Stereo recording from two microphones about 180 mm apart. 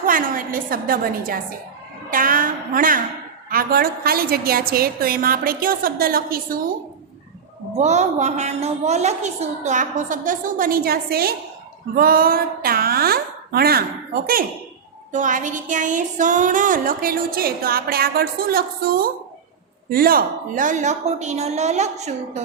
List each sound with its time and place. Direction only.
0.0 s a woman's voice: 50° right (ahead or behind)
2.0 s a sound: 50° right (ahead or behind)
3.5 s a woman's voice: 55° right (ahead or behind)
7.8 s a woman's voice: 40° right (ahead or behind)